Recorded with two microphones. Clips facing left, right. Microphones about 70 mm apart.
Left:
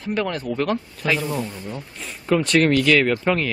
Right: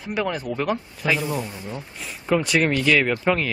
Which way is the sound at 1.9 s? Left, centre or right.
Centre.